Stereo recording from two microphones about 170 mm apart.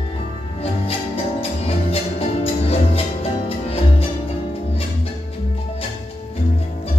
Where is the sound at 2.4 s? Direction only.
35° left (ahead or behind).